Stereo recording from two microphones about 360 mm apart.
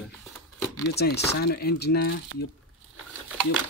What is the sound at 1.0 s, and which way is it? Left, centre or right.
Speech, left.